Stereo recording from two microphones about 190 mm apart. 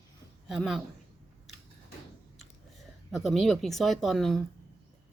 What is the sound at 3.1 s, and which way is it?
Speech, centre (ahead or behind).